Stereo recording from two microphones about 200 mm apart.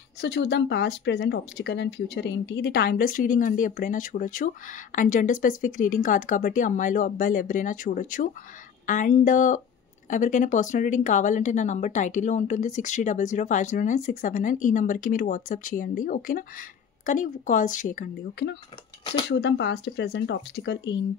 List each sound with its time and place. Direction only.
0.2 s speech: 60° left (ahead or behind); by 18.5 s 40° left (ahead or behind)
19.2 s speech: 60° left (ahead or behind)